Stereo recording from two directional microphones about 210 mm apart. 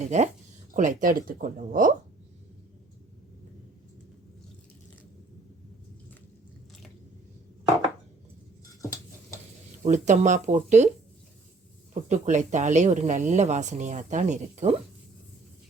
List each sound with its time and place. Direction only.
0.0 s speech: 35° right (ahead or behind)
9.8 s speech: 35° right (ahead or behind)
12.0 s speech: 35° right (ahead or behind)